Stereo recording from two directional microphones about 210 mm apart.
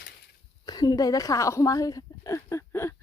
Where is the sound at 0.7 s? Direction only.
20° left (ahead or behind).